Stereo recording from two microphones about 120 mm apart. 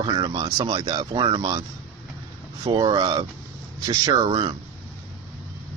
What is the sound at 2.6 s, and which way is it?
Speech, 40° right (ahead or behind).